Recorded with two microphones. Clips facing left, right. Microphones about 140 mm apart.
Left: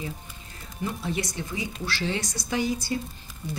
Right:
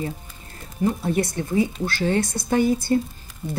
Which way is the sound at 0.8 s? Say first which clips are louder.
Right 8 dB; 50° right (ahead or behind).